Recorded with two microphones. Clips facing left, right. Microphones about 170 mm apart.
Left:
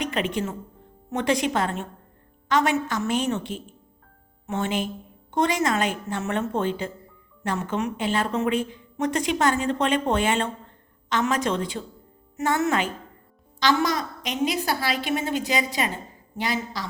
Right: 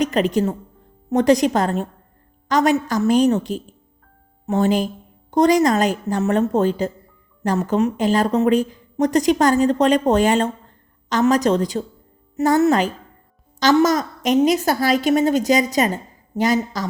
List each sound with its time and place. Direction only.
0.0 s a woman's voice: 40° right (ahead or behind)